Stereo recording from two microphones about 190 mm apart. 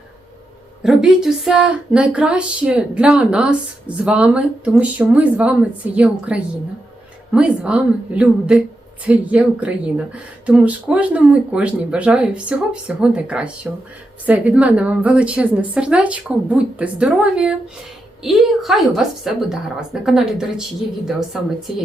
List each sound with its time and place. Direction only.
0.8 s a woman's voice: centre (ahead or behind)